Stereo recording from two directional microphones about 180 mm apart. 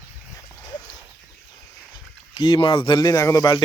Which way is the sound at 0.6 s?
20° left (ahead or behind).